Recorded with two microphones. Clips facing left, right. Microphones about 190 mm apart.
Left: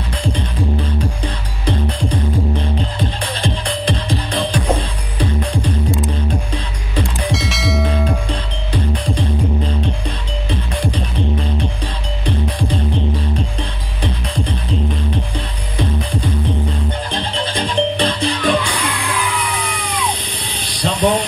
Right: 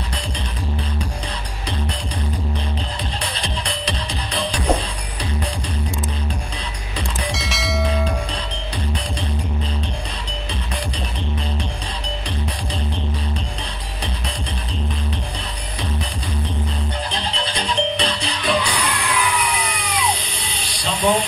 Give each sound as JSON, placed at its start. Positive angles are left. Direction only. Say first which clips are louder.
{"t": 3.0, "sound": "music", "louder": "left 6 dB", "side_deg": 55}
{"t": 7.3, "sound": "bell", "louder": "left 5 dB", "side_deg": 0}
{"t": 17.1, "sound": "music", "louder": "left 4 dB", "side_deg": 55}
{"t": 20.3, "sound": "a sound", "louder": "left 3 dB", "side_deg": 60}